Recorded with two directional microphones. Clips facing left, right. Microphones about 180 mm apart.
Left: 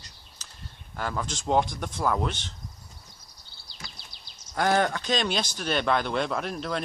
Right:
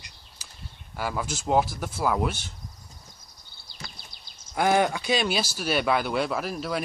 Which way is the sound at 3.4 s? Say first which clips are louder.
Right 2 dB; 50° right (ahead or behind).